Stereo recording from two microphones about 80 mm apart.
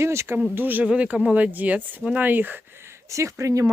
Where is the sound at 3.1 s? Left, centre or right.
Right.